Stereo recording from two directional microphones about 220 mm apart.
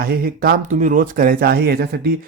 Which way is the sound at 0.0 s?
45° right (ahead or behind).